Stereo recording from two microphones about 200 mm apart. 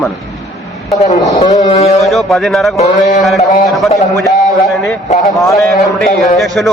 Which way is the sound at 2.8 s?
35° left (ahead or behind).